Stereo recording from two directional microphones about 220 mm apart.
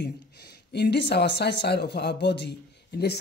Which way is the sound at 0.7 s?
50° left (ahead or behind).